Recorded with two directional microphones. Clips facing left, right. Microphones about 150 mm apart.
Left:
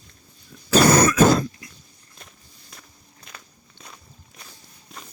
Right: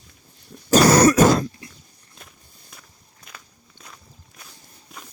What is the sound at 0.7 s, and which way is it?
Throat clearing, 45° right (ahead or behind).